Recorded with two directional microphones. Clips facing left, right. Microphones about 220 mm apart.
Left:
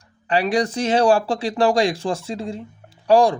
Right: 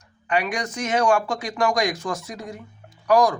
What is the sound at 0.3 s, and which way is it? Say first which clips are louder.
Speech: left 5 dB; 30° left (ahead or behind).